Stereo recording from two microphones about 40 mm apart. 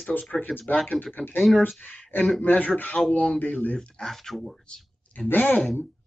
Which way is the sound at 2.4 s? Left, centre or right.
Left.